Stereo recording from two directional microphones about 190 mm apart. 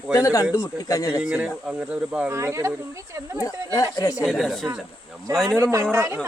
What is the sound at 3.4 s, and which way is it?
Speech, 20° left (ahead or behind).